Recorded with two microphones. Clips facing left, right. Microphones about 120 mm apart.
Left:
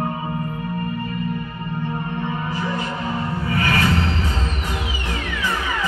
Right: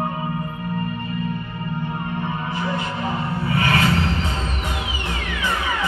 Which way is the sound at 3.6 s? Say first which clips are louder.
Right 1 dB; 25° right (ahead or behind).